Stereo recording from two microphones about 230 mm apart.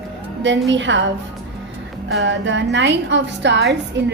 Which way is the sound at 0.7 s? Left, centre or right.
Right.